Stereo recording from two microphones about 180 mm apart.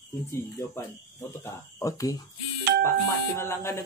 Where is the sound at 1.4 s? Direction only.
15° left (ahead or behind).